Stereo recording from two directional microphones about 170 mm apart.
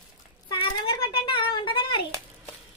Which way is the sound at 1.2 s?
30° left (ahead or behind).